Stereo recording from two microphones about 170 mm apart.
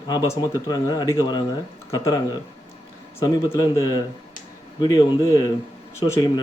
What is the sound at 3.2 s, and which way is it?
A man's voice, 20° left (ahead or behind).